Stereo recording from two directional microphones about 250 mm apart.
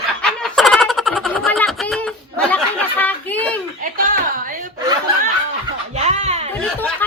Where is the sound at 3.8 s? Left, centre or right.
Right.